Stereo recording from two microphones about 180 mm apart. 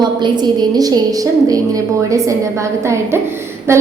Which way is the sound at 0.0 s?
25° right (ahead or behind).